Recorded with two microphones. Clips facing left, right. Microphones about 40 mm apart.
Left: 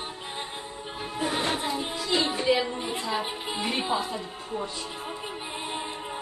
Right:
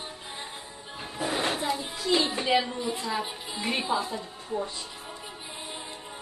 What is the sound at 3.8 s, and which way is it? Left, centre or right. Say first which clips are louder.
Speech: left 1 dB; left.